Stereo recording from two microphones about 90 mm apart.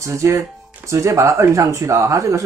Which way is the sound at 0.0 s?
35° right (ahead or behind).